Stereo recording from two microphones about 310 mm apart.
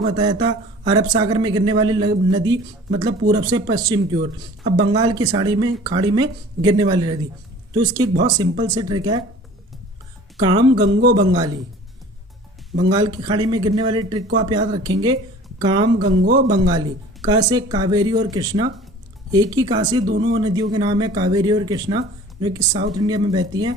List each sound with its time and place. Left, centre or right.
0.1 s speech: centre
10.3 s speech: centre
12.9 s speech: centre
16.0 s speech: right
16.6 s speech: centre